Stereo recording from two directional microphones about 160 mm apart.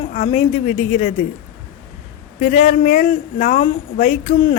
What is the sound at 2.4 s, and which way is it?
Speech, 45° left (ahead or behind).